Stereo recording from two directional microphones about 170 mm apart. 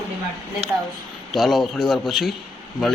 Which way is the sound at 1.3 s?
Centre (ahead or behind).